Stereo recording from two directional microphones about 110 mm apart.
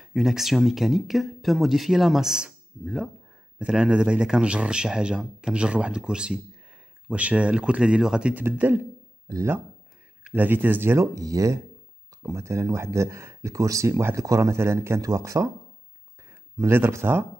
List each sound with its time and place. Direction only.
0.0 s speech: 5° right (ahead or behind); by 11.1 s 20° right (ahead or behind)
11.1 s speech: 30° right (ahead or behind)
16.5 s speech: 20° right (ahead or behind)